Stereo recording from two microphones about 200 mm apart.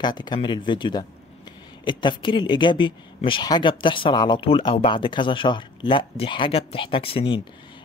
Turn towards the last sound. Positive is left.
turn(degrees=25)  # may be behind; listen again after turning